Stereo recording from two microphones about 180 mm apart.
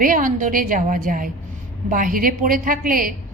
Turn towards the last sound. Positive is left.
turn(degrees=-50)  # may be behind; listen again after turning